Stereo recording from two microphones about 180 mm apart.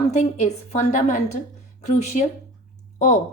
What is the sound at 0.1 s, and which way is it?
A woman's voice, 40° left (ahead or behind).